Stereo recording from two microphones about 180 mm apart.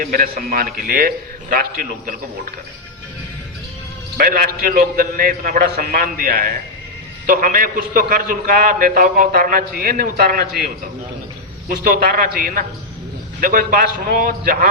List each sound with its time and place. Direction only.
0.0 s a man's voice: 55° right (ahead or behind)
4.2 s a man's voice: 55° right (ahead or behind)
11.8 s a man's voice: 55° right (ahead or behind)